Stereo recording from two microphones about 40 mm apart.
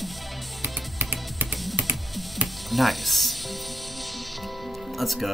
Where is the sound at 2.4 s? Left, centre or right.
Centre.